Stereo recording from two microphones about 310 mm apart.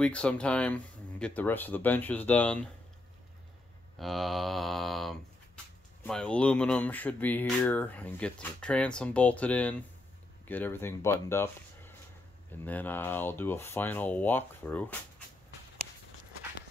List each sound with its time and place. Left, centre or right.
0.0 s speech: centre
4.0 s speech: centre